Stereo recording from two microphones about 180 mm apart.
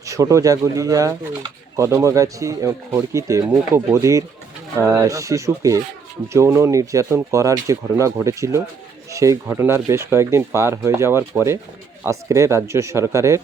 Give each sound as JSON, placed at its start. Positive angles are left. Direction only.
{"t": 0.0, "sound": "speech", "side_deg": -15}